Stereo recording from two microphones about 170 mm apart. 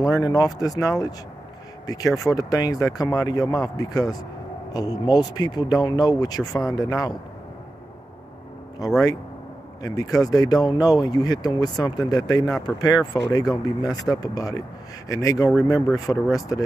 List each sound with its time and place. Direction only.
0.2 s speech: 20° left (ahead or behind)
9.8 s speech: 20° left (ahead or behind)